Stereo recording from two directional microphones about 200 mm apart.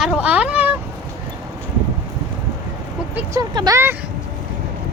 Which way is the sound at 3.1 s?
15° right (ahead or behind).